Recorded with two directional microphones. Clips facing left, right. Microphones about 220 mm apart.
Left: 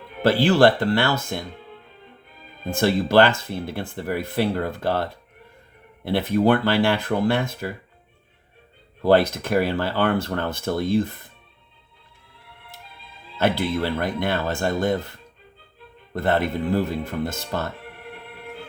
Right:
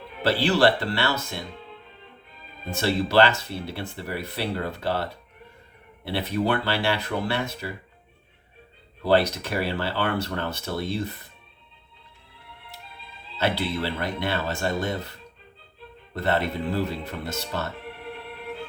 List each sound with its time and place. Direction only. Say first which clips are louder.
0.2 s speech: left 4 dB; 50° left (ahead or behind)
2.6 s speech: left 4 dB; 50° left (ahead or behind)
6.1 s speech: left 6 dB; 50° left (ahead or behind)
9.0 s speech: left 4 dB; 50° left (ahead or behind)
13.4 s speech: left 4 dB; 50° left (ahead or behind)
16.1 s speech: left 3 dB; 50° left (ahead or behind)